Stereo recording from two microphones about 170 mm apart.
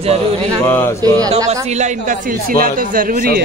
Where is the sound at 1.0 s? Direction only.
20° right (ahead or behind).